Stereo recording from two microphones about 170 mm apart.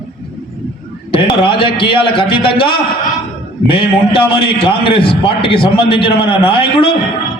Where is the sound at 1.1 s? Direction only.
30° left (ahead or behind).